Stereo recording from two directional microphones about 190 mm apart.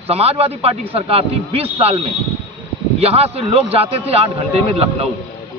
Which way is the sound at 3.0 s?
30° right (ahead or behind).